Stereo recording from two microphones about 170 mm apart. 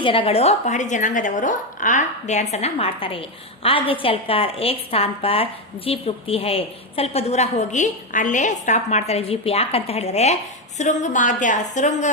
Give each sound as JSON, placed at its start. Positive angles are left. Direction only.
{"t": 0.0, "sound": "a woman's voice", "side_deg": 30}